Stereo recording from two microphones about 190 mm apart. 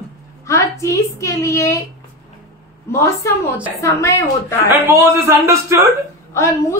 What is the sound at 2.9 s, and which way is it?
A woman's voice, 15° left (ahead or behind).